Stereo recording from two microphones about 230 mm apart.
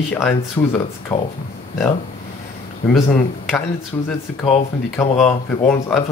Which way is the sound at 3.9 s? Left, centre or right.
Centre.